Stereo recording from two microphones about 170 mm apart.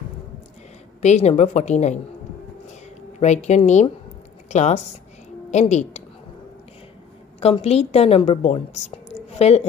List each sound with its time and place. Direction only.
1.0 s a woman's voice: 45° left (ahead or behind)
3.2 s a woman's voice: 40° left (ahead or behind)
7.3 s a woman's voice: 35° left (ahead or behind)